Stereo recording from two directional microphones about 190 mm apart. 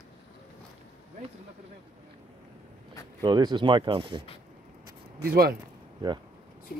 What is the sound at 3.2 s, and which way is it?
Speech, 25° right (ahead or behind).